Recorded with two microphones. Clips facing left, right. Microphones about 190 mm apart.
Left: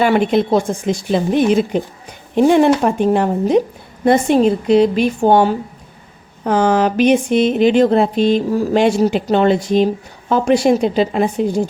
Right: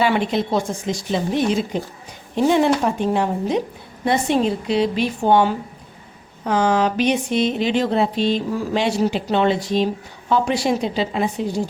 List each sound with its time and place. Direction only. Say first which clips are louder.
0.0 s a woman's voice: left 5 dB; 55° left (ahead or behind)